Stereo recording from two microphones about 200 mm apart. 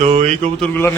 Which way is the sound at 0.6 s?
10° left (ahead or behind).